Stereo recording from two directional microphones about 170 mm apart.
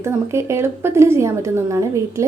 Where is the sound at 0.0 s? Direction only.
15° right (ahead or behind).